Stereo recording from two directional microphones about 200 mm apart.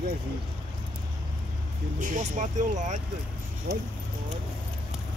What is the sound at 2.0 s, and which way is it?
Speech, 40° right (ahead or behind).